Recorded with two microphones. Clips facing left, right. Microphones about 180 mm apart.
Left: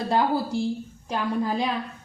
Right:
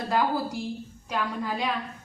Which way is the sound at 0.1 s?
30° left (ahead or behind).